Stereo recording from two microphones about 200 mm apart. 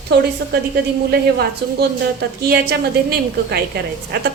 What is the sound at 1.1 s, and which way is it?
A woman's voice, 50° right (ahead or behind).